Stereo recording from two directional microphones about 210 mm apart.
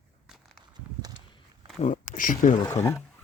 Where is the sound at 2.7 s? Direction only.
15° left (ahead or behind).